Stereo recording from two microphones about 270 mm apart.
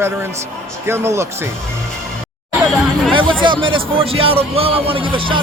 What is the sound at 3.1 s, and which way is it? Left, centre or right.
Hubbub, centre.